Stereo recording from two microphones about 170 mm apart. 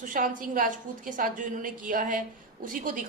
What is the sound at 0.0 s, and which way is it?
A woman's voice, 50° right (ahead or behind).